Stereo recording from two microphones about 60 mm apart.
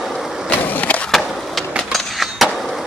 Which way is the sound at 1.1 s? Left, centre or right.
Centre.